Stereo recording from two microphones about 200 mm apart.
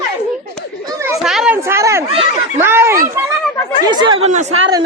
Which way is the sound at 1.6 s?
15° right (ahead or behind).